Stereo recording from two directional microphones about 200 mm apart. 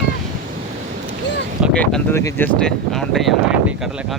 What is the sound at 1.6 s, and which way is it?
Speech, 5° left (ahead or behind).